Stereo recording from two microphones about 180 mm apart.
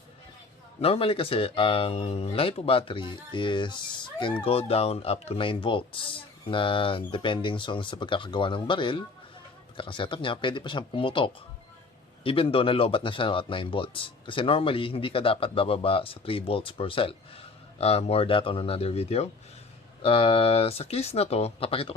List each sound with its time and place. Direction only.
0.8 s speech: 30° left (ahead or behind)